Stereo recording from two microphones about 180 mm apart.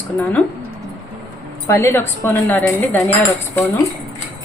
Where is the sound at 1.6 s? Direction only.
15° left (ahead or behind).